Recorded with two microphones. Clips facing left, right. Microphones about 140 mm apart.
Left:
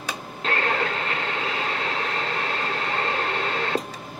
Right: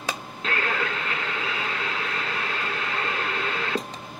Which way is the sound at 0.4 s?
35° left (ahead or behind).